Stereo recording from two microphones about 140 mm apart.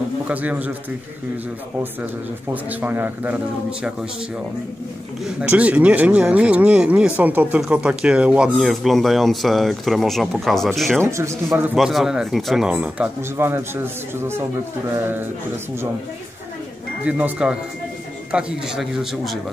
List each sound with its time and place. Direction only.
0.3 s speech: 10° right (ahead or behind)
2.5 s speech: 15° right (ahead or behind)
5.2 s speech: 10° right (ahead or behind)
11.0 s speech: 20° right (ahead or behind)
11.7 s speech: centre (ahead or behind)
17.0 s speech: 10° right (ahead or behind)